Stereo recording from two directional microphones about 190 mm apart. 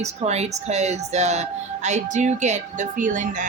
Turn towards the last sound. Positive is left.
turn(degrees=-45)  # may be behind; listen again after turning